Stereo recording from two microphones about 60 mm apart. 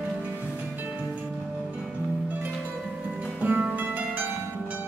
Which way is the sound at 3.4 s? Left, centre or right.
Right.